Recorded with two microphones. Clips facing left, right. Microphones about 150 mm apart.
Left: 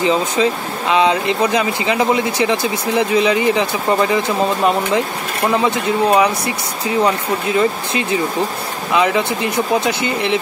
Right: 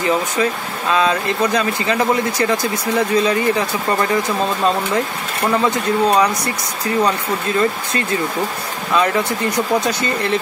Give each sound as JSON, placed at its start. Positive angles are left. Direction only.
{"t": 0.0, "sound": "speech", "side_deg": 20}
{"t": 8.9, "sound": "speech", "side_deg": 15}